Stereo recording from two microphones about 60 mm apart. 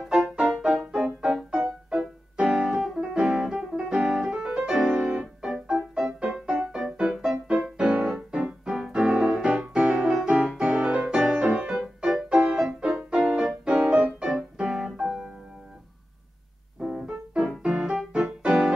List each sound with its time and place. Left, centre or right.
0.1 s music: centre
4.9 s keyboard: centre
5.9 s music: centre
12.5 s music: centre
14.3 s piano: centre
16.8 s music: centre